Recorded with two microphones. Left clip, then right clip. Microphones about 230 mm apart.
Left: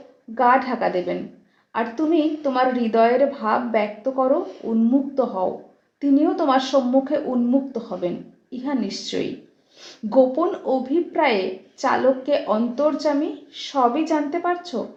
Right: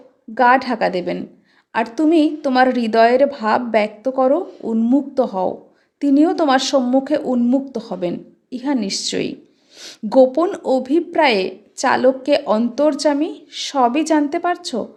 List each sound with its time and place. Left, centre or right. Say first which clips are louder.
0.3 s a woman's voice: right 4 dB; right